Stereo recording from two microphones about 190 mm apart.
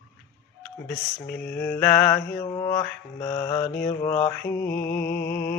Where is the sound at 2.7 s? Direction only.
5° left (ahead or behind).